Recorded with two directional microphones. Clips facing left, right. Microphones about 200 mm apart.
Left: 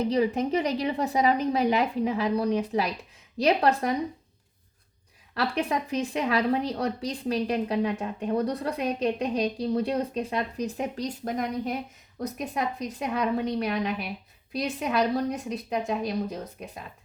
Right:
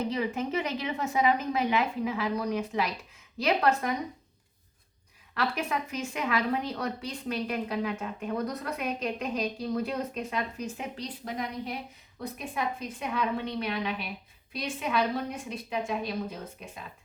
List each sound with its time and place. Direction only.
0.1 s a woman's voice: 35° left (ahead or behind)
5.3 s a woman's voice: 35° left (ahead or behind)